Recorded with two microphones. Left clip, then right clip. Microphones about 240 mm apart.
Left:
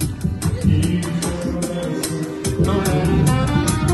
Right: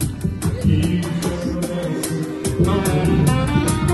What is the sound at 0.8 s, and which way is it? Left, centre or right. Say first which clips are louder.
Music: even; left.